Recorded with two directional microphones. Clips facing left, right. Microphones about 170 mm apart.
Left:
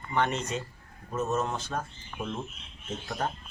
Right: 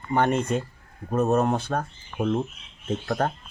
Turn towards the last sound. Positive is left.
turn(degrees=-60)  # may be behind; listen again after turning